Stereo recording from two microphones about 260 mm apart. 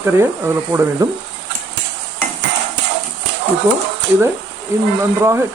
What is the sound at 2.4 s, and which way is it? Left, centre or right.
Clip-clop, right.